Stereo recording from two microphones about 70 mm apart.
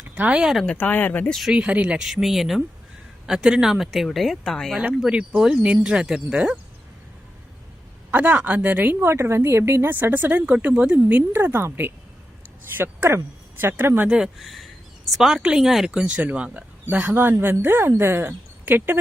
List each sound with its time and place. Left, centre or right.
0.1 s speech: centre
0.6 s speech: centre
1.5 s speech: centre
2.0 s speech: centre
4.9 s a woman's voice: centre
8.1 s a woman's voice: right
9.9 s a woman's voice: right
14.1 s speech: centre
14.4 s a sound: centre
15.4 s speech: centre; by 18.9 s right